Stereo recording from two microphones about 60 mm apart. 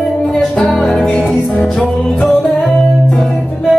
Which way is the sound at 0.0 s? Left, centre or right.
Centre.